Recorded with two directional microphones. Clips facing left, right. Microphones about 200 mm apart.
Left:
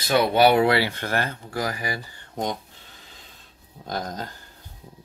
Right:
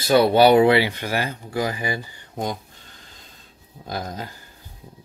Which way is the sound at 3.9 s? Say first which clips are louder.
Even; 5° right (ahead or behind).